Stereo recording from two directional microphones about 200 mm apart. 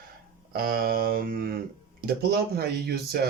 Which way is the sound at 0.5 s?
50° right (ahead or behind).